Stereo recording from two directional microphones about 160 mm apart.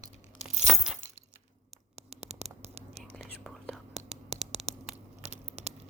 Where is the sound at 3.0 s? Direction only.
Centre (ahead or behind).